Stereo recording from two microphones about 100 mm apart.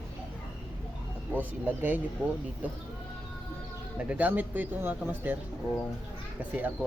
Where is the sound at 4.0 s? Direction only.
15° right (ahead or behind).